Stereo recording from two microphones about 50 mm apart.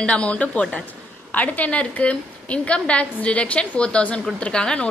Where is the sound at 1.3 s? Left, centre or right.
Left.